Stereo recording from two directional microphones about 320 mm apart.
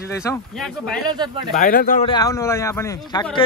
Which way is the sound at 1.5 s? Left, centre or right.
Left.